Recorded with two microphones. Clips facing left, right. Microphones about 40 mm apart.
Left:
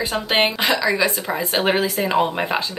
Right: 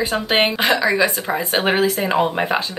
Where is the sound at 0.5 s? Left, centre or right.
Right.